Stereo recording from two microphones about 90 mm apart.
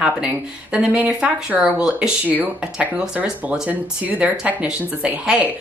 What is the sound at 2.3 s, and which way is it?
Speech, 20° right (ahead or behind).